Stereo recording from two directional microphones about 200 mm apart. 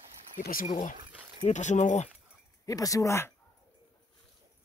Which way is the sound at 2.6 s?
15° left (ahead or behind).